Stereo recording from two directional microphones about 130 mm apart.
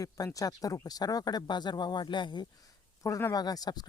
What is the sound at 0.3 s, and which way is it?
Speech, 25° left (ahead or behind).